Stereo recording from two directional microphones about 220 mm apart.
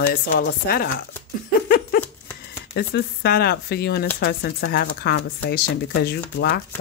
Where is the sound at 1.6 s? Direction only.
45° left (ahead or behind).